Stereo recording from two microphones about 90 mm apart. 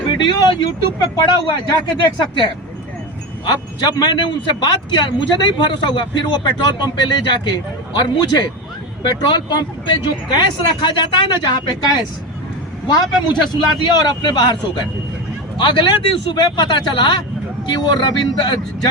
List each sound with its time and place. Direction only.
0.1 s speech: 55° left (ahead or behind)
12.9 s speech: 50° left (ahead or behind)